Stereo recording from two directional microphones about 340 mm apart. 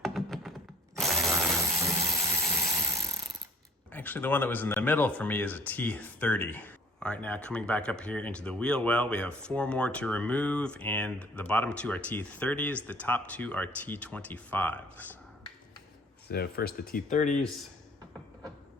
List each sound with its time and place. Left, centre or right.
0.0 s computer keyboard: centre
0.9 s a sound: centre
3.9 s speech: centre
16.3 s speech: left